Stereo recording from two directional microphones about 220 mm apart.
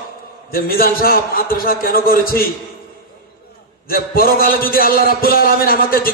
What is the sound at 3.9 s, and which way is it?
A man's voice, 40° left (ahead or behind).